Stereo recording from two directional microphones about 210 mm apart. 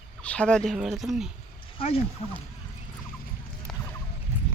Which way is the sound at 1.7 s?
25° left (ahead or behind).